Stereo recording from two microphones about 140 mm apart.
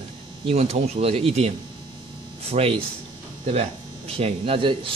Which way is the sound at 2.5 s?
50° right (ahead or behind).